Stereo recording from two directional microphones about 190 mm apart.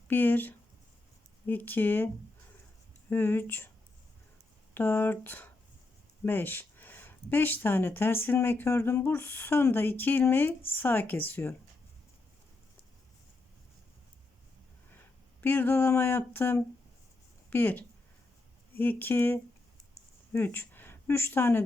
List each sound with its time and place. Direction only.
0.1 s speech: 10° left (ahead or behind)
3.1 s speech: 10° left (ahead or behind)
4.7 s speech: 10° left (ahead or behind)
15.4 s speech: 10° left (ahead or behind)